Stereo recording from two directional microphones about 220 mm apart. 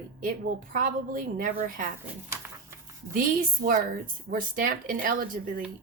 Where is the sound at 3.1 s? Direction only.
40° right (ahead or behind).